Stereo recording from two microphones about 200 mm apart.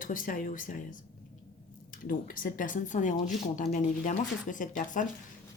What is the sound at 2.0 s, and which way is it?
Speech, 45° left (ahead or behind).